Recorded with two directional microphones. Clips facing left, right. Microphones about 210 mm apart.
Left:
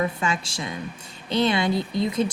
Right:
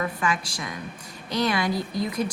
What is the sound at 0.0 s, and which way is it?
A woman's voice, 25° left (ahead or behind).